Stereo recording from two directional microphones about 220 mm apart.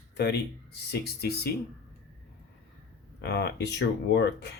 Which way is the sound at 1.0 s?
45° left (ahead or behind).